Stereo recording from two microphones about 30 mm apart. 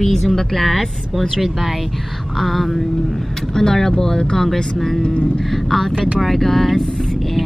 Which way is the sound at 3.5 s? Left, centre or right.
Centre.